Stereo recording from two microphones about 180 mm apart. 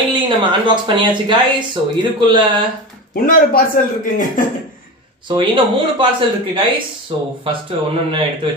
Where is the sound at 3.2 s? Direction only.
55° left (ahead or behind).